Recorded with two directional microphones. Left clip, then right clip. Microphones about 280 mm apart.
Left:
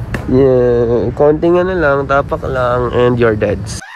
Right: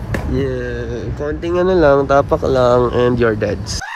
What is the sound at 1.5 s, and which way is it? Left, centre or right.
Speech, centre.